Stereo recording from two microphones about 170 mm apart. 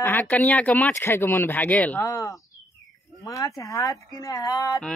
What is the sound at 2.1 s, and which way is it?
Speech, 20° left (ahead or behind).